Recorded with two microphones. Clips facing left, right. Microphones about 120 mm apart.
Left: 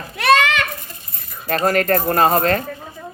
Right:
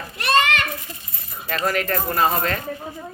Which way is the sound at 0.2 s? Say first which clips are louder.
Left 4 dB; 90° left.